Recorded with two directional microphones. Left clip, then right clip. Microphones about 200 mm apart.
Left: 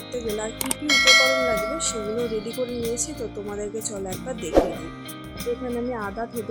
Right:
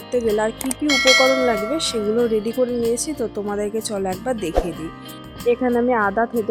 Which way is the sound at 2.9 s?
40° right (ahead or behind).